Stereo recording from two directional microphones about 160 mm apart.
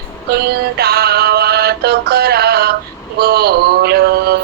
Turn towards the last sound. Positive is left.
turn(degrees=-85)